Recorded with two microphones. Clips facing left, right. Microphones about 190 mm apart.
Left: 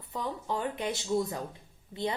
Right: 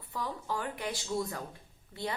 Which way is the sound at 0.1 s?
20° left (ahead or behind).